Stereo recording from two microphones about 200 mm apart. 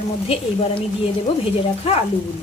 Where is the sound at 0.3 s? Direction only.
30° left (ahead or behind).